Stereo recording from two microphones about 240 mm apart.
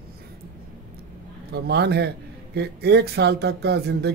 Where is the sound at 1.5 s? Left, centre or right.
Right.